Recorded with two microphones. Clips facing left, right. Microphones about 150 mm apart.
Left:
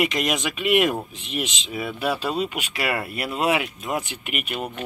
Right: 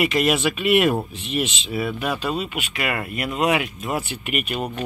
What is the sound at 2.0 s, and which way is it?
Speech, 30° left (ahead or behind).